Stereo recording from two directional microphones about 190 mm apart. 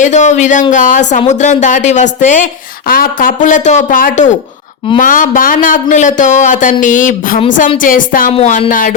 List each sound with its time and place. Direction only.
0.0 s speech: 40° left (ahead or behind)